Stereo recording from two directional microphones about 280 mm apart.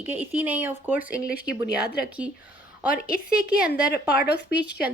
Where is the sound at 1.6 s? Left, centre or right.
Left.